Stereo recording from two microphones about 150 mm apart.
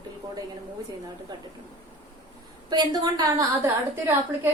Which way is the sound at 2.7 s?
30° right (ahead or behind).